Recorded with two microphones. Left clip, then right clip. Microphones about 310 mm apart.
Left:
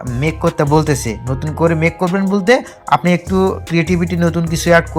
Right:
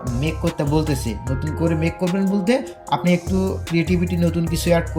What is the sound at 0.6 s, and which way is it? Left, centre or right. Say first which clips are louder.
Speech: left 8 dB; centre.